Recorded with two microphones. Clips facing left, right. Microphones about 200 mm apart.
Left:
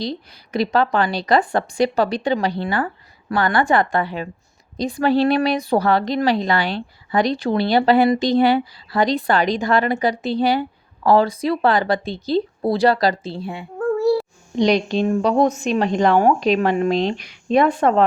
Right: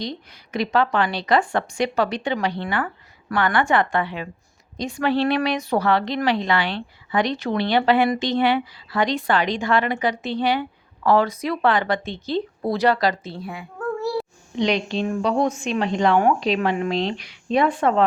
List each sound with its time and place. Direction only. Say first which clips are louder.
0.0 s a woman's voice: left 4 dB; 35° left (ahead or behind)
14.5 s a woman's voice: left 5 dB; 40° left (ahead or behind)